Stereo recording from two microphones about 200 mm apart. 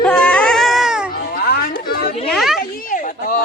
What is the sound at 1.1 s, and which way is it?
Speech, 45° left (ahead or behind).